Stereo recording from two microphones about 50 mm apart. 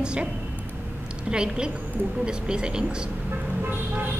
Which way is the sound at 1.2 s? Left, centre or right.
Centre.